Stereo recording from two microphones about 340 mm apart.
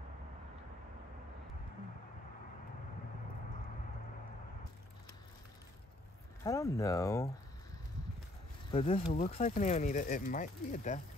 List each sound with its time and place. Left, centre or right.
6.4 s speech: centre
8.7 s speech: centre